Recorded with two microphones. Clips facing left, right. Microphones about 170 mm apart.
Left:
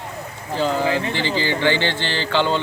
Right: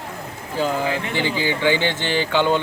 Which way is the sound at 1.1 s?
15° right (ahead or behind).